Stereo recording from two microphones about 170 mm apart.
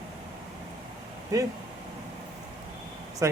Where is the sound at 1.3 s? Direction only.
20° right (ahead or behind).